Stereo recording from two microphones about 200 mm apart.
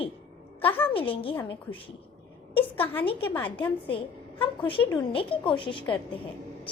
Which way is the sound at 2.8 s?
10° left (ahead or behind).